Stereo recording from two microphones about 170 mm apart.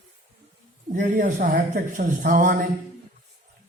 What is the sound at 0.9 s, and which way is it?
A man's voice, 55° right (ahead or behind).